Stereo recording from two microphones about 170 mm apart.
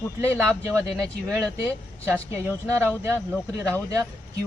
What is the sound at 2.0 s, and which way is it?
Speech, 15° right (ahead or behind).